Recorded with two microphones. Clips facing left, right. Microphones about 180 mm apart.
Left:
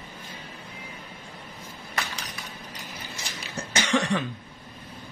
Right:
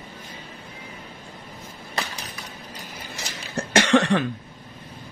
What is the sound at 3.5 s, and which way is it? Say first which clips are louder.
Cough: right 7 dB; 65° right (ahead or behind).